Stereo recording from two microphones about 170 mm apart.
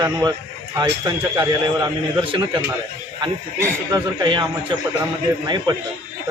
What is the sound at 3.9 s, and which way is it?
Speech, 25° right (ahead or behind).